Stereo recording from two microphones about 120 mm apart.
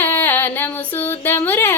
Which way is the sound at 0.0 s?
15° left (ahead or behind).